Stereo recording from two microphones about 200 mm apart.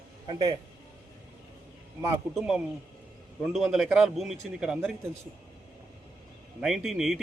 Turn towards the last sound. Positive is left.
turn(degrees=0)  # may be behind; listen again after turning